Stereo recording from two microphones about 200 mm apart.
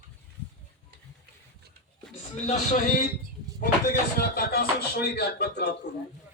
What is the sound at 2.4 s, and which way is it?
Speech, 35° left (ahead or behind).